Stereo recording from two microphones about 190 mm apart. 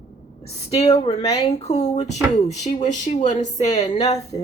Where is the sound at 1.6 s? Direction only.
35° left (ahead or behind).